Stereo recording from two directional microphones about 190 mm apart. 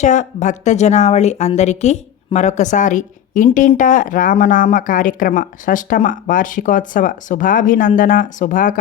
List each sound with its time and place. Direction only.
0.0 s a woman's voice: 40° left (ahead or behind)